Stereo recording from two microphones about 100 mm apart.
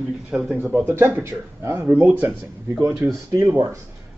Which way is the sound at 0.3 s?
10° right (ahead or behind).